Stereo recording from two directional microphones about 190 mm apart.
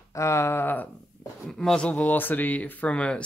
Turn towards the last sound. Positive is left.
turn(degrees=5)  # may be behind; listen again after turning